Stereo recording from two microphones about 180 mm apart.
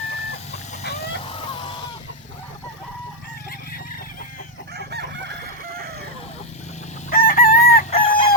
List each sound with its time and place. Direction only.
1.2 s vehicle: 30° left (ahead or behind)
4.7 s chicken: 65° right (ahead or behind)
7.1 s chicken: 50° left (ahead or behind)
7.9 s chicken: 30° left (ahead or behind)